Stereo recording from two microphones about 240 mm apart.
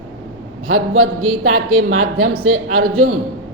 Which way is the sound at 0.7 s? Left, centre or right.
Right.